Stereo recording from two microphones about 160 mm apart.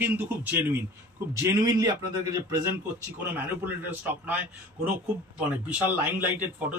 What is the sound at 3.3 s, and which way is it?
A man's voice, 10° right (ahead or behind).